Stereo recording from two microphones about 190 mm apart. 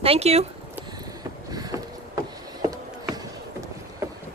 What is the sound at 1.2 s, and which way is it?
Vehicle, 20° right (ahead or behind).